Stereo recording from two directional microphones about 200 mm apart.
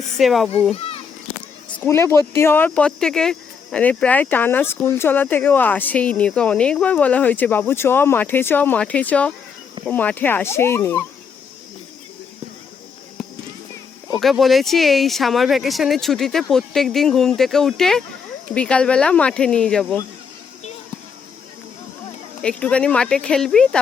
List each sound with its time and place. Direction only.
0.2 s speech: centre (ahead or behind)
0.8 s a sound: 30° left (ahead or behind)
1.8 s speech: 10° left (ahead or behind)
14.2 s speech: centre (ahead or behind)
22.4 s speech: 5° left (ahead or behind)